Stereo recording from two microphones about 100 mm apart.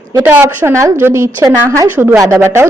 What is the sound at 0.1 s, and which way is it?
A woman's voice, 25° right (ahead or behind).